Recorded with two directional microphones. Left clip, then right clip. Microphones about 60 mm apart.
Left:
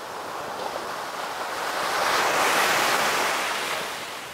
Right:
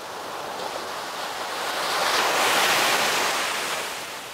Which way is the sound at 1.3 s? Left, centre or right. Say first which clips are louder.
Even; centre.